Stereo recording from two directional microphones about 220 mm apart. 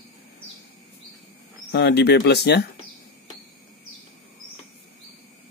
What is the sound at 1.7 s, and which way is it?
Speech, 50° left (ahead or behind).